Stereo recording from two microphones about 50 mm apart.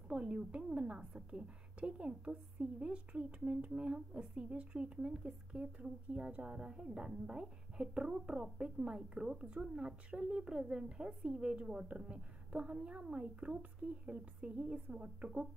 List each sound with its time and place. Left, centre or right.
0.1 s a woman's voice: right